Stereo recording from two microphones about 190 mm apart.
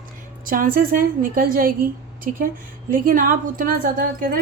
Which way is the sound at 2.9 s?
45° right (ahead or behind).